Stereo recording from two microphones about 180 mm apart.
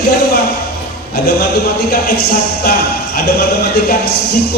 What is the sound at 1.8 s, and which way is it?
Speech, 60° left (ahead or behind).